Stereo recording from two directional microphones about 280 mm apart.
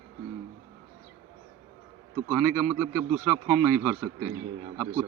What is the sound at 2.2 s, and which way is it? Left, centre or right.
Speech, centre.